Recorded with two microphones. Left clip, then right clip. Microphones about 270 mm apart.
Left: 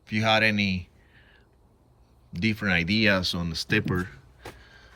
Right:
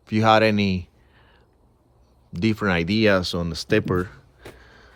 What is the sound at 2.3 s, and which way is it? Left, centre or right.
Speech, centre.